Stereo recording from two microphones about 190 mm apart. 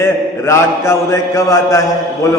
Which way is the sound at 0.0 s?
15° left (ahead or behind).